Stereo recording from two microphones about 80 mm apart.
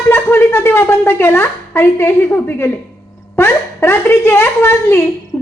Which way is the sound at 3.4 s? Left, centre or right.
Left.